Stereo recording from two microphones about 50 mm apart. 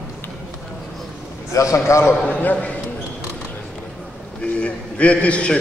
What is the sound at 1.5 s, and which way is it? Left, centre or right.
Speech, left.